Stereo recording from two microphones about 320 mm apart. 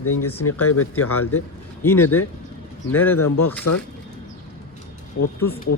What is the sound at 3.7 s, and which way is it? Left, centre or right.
Speech, left.